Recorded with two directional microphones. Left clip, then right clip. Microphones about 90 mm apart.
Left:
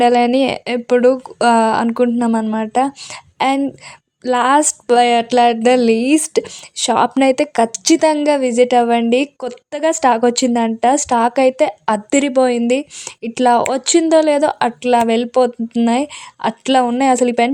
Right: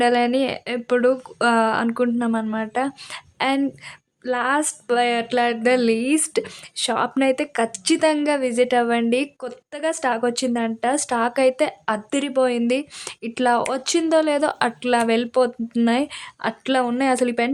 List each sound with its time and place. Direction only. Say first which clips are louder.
0.0 s speech: left 6 dB; 50° left (ahead or behind); by 0.8 s 70° left (ahead or behind)
0.9 s a woman's voice: left 6 dB; 45° left (ahead or behind)
4.2 s a woman's voice: left 8 dB; 65° left (ahead or behind); by 6.9 s 40° left (ahead or behind)
6.9 s a woman's voice: left 7 dB; 60° left (ahead or behind); by 11.7 s 40° left (ahead or behind)
11.9 s a woman's voice: left 8 dB; 55° left (ahead or behind)